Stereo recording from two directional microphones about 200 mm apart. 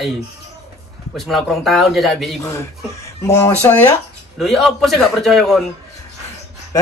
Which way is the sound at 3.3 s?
10° left (ahead or behind).